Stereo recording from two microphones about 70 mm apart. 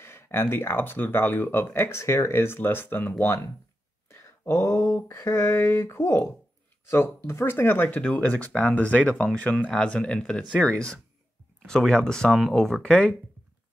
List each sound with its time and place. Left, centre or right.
0.0 s speech: left
4.1 s a sound: left
5.0 s speech: left
8.0 s speech: centre